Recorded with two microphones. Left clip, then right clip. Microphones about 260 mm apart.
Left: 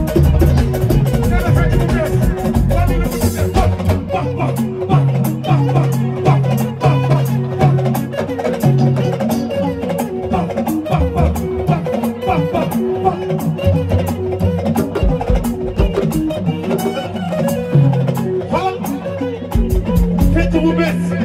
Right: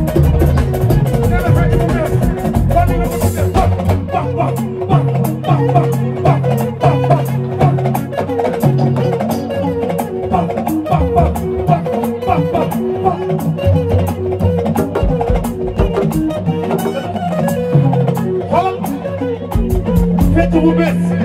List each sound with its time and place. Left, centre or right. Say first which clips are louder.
1.5 s music: right 2 dB; right
10.9 s music: right 4 dB; right
19.9 s music: right 3 dB; right